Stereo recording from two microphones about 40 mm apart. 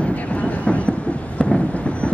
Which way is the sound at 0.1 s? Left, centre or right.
Left.